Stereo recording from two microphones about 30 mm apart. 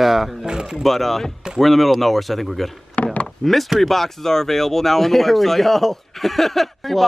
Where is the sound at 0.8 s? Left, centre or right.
Centre.